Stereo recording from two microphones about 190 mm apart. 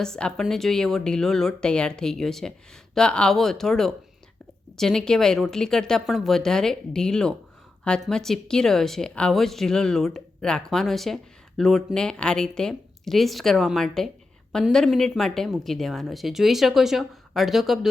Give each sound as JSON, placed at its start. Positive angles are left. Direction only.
{"t": 0.0, "sound": "speech", "side_deg": 5}